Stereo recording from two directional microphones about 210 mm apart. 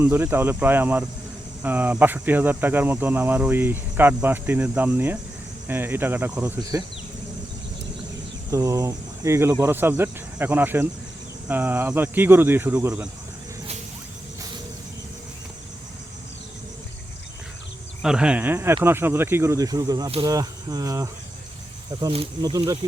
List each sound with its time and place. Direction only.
0.0 s speech: 10° right (ahead or behind)
8.4 s speech: 15° right (ahead or behind)
18.0 s speech: 5° right (ahead or behind)